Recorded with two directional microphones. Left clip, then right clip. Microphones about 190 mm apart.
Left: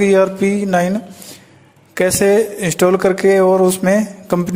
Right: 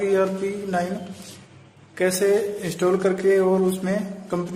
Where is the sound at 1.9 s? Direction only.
50° left (ahead or behind).